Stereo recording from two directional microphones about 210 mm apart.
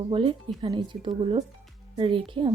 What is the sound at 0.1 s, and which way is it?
Speech, 25° right (ahead or behind).